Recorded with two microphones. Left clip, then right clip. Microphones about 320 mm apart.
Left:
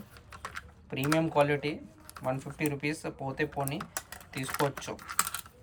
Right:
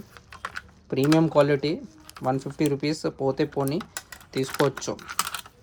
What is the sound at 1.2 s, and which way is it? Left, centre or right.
Speech, centre.